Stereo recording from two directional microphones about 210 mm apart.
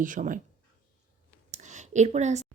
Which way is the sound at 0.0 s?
40° right (ahead or behind).